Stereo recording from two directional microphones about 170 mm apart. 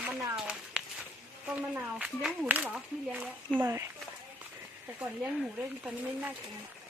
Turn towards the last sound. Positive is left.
turn(degrees=-10)  # may be behind; listen again after turning